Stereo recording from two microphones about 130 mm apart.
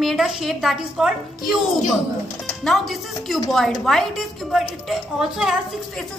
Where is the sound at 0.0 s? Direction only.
Centre (ahead or behind).